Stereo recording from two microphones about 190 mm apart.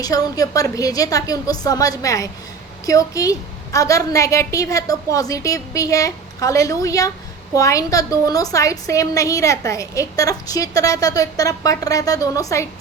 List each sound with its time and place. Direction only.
0.0 s a woman's voice: 20° left (ahead or behind)